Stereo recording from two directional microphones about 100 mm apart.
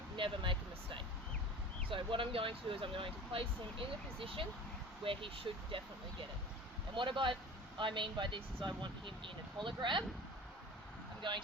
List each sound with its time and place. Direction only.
0.2 s a sound: 55° right (ahead or behind)
1.9 s speech: 60° right (ahead or behind)
11.2 s speech: 55° right (ahead or behind)